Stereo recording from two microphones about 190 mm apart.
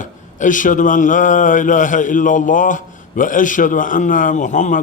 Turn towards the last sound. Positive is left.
turn(degrees=40)  # may be behind; listen again after turning